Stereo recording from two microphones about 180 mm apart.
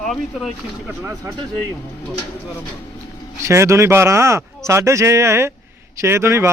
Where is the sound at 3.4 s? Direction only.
15° right (ahead or behind).